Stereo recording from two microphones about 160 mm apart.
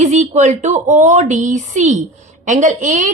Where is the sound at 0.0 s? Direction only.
45° right (ahead or behind).